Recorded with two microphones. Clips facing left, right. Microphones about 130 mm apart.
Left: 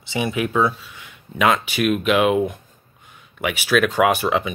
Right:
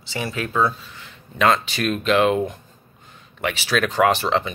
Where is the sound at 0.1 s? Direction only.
20° left (ahead or behind).